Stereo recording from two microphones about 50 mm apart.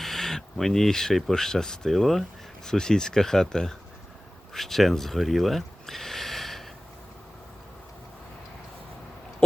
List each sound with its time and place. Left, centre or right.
0.0 s speech: centre